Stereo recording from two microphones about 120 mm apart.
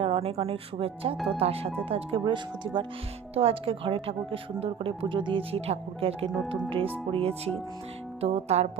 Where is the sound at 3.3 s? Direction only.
55° right (ahead or behind).